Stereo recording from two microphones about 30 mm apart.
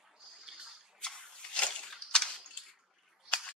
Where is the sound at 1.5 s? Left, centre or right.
Left.